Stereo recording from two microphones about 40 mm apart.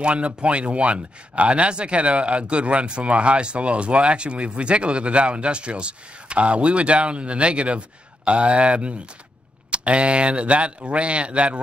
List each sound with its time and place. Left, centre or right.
0.0 s speech: right